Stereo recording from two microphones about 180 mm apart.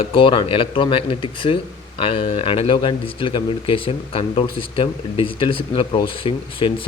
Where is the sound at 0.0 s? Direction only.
30° left (ahead or behind).